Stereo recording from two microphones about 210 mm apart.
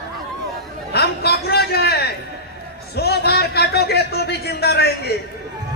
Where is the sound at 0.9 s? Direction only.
50° left (ahead or behind).